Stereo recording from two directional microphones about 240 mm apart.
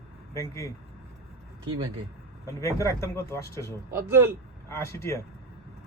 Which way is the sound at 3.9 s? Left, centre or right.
Centre.